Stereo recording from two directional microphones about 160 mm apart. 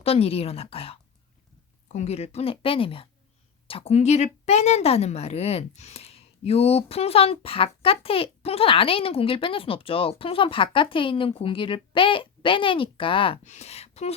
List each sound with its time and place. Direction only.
0.0 s a woman's voice: 40° left (ahead or behind)
13.4 s a woman's voice: 45° left (ahead or behind)